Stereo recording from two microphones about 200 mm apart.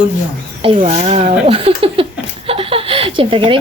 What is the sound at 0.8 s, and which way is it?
Speech, 35° right (ahead or behind).